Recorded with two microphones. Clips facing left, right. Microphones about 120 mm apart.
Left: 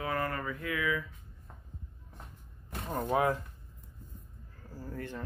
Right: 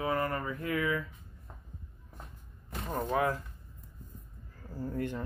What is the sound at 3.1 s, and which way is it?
Speech, 25° left (ahead or behind).